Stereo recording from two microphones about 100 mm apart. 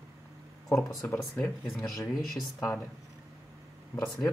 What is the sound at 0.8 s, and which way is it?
Speech, 35° left (ahead or behind).